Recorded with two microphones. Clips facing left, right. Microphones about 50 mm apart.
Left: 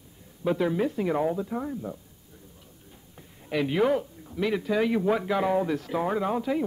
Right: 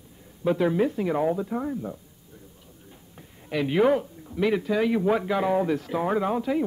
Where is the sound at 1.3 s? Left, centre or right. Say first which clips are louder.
Right 3 dB; centre.